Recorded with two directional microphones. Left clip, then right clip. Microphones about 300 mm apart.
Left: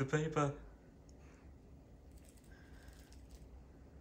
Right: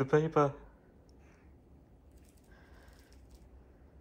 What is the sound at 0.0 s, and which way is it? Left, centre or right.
Speech, centre.